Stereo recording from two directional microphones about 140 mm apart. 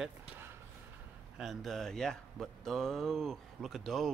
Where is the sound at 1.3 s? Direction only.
Centre (ahead or behind).